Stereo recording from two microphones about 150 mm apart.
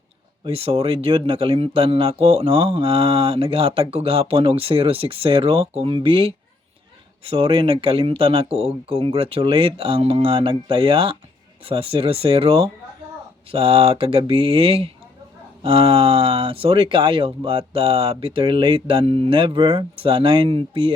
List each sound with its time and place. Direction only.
0.4 s speech: 40° right (ahead or behind)